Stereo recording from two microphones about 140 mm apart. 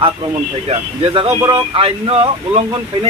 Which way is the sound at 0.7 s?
45° right (ahead or behind).